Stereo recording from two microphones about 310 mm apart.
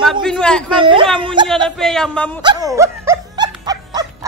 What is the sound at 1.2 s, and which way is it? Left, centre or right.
Speech, centre.